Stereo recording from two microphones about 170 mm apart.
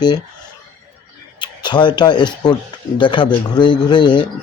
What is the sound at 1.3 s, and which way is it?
Speech, 25° left (ahead or behind).